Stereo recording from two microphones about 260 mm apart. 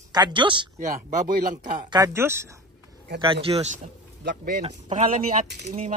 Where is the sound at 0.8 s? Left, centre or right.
Right.